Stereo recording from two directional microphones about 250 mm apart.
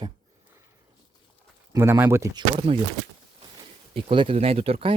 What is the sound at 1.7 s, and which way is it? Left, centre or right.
Speech, centre.